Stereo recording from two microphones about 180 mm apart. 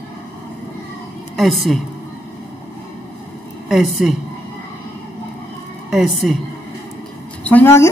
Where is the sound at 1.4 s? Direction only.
Centre (ahead or behind).